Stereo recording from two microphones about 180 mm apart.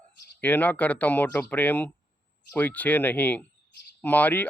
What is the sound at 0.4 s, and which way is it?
Speech, 10° left (ahead or behind).